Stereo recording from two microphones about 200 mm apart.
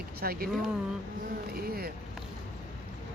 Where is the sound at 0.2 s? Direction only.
50° right (ahead or behind).